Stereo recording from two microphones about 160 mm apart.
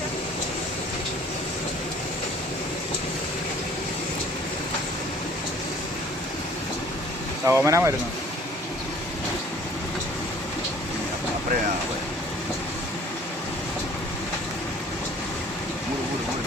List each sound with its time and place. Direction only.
7.4 s speech: 15° right (ahead or behind)